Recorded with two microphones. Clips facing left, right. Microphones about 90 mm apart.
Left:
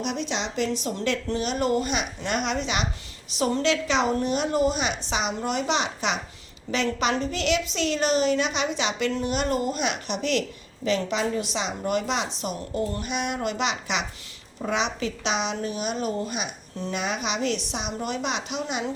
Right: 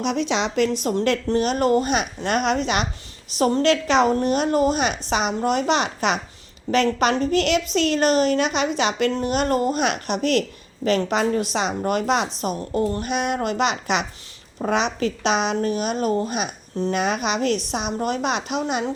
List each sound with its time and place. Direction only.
0.0 s a woman's voice: 90° right; by 18.9 s 50° right (ahead or behind)